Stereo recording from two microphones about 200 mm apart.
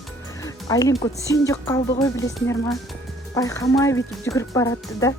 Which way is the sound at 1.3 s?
15° left (ahead or behind).